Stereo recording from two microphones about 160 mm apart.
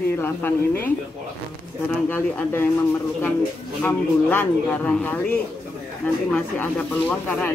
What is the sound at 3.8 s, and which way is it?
Speech, 10° left (ahead or behind).